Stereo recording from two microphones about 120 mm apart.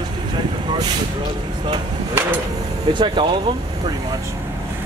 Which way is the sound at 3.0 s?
40° right (ahead or behind).